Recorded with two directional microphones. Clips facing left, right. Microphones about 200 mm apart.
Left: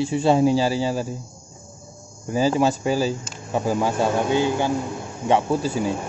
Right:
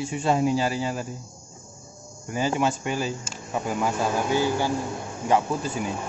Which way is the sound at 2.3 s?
35° left (ahead or behind).